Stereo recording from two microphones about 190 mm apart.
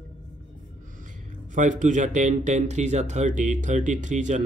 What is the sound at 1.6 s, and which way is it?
Speech, 40° right (ahead or behind).